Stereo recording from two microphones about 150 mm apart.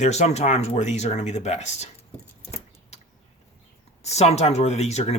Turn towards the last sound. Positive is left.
turn(degrees=45)  # may be behind; listen again after turning